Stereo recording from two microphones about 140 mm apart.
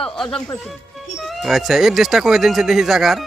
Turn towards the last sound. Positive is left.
turn(degrees=-5)  # may be behind; listen again after turning